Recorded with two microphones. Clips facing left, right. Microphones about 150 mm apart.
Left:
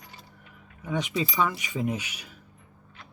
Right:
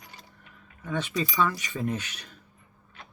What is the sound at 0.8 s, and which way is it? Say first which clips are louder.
Speech: left 1 dB; 15° left (ahead or behind).